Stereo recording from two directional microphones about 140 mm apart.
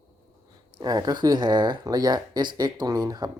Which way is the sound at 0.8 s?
30° right (ahead or behind).